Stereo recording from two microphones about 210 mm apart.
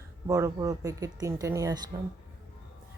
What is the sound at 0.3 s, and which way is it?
Speech, 15° right (ahead or behind).